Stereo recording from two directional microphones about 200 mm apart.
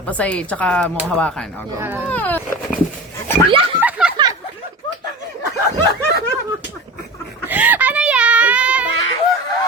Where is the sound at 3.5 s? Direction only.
25° right (ahead or behind).